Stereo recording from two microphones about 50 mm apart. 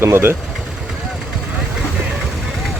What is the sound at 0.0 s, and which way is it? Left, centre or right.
Speech, right.